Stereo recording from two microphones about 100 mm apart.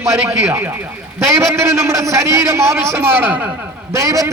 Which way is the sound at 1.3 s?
30° right (ahead or behind).